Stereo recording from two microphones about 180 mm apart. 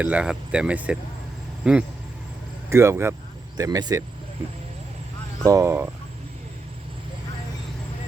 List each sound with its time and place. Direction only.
0.0 s speech: 5° right (ahead or behind)
5.5 s speech: 15° right (ahead or behind)